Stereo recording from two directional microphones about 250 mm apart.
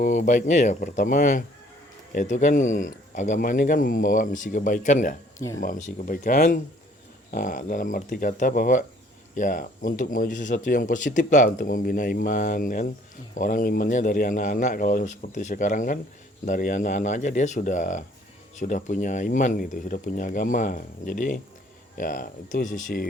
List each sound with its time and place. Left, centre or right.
0.0 s speech: left